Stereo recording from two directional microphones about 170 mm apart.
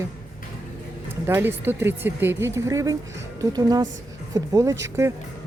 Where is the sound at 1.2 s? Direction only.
15° right (ahead or behind).